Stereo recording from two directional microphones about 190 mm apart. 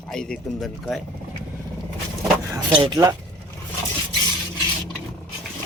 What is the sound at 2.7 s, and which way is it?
Speech, 25° right (ahead or behind).